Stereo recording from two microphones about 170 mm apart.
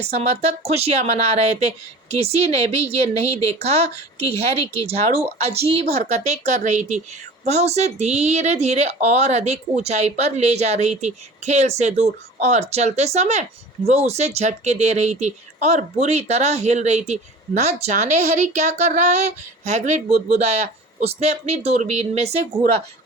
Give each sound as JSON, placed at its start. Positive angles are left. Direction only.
{"t": 0.0, "sound": "speech", "side_deg": -40}